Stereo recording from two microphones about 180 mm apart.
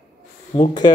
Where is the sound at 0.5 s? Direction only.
25° left (ahead or behind).